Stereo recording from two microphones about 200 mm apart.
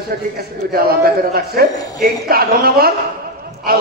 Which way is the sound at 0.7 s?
50° right (ahead or behind).